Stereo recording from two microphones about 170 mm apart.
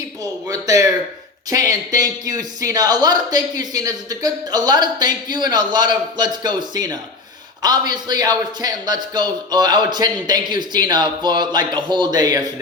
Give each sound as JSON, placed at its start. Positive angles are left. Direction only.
{"t": 0.2, "sound": "speech", "side_deg": -20}